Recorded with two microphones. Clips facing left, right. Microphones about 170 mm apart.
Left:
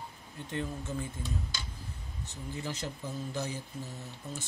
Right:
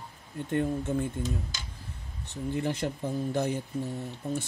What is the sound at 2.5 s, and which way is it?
Speech, 55° right (ahead or behind).